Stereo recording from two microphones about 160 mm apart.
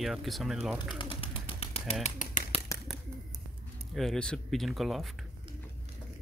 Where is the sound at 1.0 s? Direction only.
35° left (ahead or behind).